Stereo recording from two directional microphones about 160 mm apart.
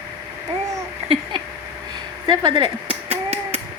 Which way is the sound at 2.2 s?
25° right (ahead or behind).